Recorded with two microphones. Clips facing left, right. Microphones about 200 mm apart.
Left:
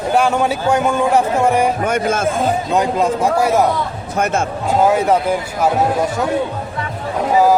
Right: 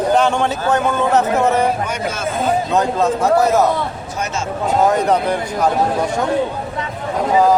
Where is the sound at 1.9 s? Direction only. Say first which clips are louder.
Left 5 dB; 50° left (ahead or behind).